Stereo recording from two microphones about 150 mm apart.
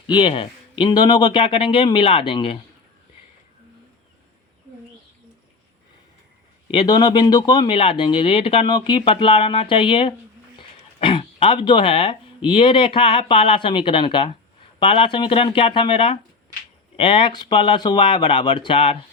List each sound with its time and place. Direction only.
0.1 s speech: 35° left (ahead or behind)
6.7 s speech: 30° left (ahead or behind)